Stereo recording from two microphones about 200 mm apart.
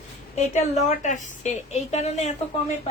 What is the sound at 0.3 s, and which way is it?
Speech, 35° left (ahead or behind).